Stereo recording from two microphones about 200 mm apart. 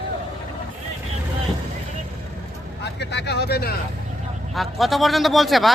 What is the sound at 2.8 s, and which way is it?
Speech, 60° left (ahead or behind).